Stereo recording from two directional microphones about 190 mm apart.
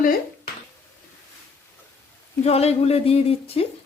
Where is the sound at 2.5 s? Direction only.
35° left (ahead or behind).